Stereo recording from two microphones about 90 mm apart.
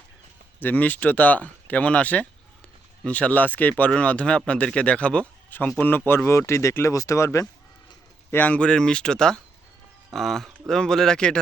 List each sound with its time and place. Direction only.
0.6 s speech: 20° left (ahead or behind)
8.3 s speech: 20° left (ahead or behind)